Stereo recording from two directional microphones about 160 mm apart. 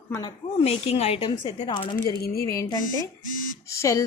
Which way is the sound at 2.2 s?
70° left (ahead or behind).